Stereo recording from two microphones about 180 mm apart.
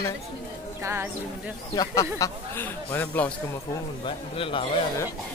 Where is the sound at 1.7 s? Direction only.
20° left (ahead or behind).